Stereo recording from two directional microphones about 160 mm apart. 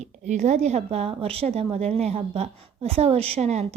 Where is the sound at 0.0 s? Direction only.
45° right (ahead or behind).